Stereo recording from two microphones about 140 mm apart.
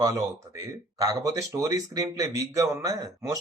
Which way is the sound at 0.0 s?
25° right (ahead or behind).